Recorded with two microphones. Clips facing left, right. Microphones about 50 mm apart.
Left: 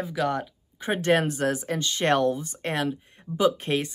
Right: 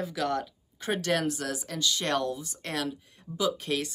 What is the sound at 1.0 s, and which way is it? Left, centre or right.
Speech, left.